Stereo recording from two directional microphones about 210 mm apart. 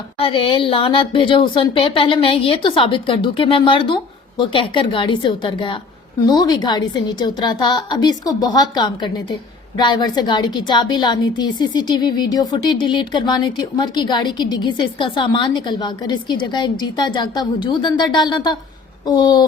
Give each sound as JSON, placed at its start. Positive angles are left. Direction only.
{"t": 0.2, "sound": "a woman's voice", "side_deg": 25}